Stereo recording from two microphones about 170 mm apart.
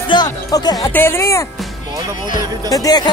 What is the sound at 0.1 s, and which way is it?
Speech, 25° left (ahead or behind).